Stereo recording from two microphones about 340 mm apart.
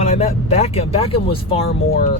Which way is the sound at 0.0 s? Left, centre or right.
Centre.